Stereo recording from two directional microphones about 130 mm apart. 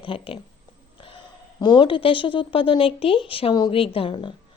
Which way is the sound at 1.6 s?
35° left (ahead or behind).